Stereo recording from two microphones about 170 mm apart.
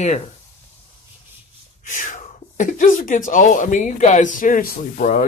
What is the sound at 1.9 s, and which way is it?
Speech, 50° left (ahead or behind).